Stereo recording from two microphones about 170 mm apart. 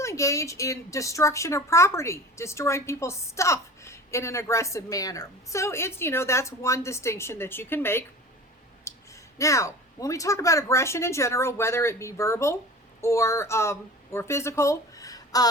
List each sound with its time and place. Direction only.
0.0 s a woman's voice: 15° left (ahead or behind)
8.9 s clicking: 15° left (ahead or behind)
9.4 s a woman's voice: 20° left (ahead or behind)